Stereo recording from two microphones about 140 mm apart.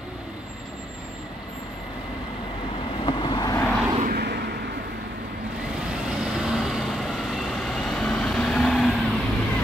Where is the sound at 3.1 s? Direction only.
35° left (ahead or behind).